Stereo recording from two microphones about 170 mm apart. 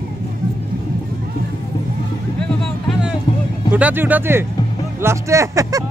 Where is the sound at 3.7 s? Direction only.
10° right (ahead or behind).